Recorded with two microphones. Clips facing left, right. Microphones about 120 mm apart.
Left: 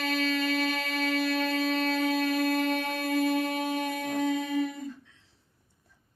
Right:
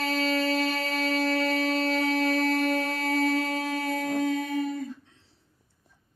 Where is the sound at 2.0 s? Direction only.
15° left (ahead or behind).